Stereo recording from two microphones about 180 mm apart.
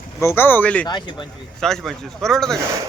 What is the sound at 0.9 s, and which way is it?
Speech, 25° left (ahead or behind).